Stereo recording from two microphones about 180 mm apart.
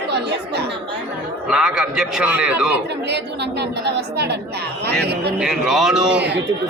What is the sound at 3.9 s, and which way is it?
Speech, 65° right (ahead or behind).